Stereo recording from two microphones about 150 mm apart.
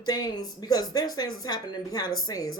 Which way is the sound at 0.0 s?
25° left (ahead or behind).